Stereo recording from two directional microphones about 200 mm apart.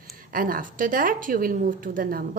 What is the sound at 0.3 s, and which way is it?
A woman's voice, 45° right (ahead or behind).